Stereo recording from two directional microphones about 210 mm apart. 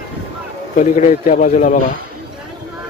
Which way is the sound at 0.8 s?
35° left (ahead or behind).